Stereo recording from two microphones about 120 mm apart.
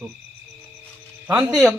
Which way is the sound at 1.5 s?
Centre (ahead or behind).